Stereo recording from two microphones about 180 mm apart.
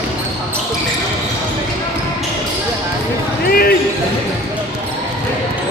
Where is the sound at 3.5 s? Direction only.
55° left (ahead or behind).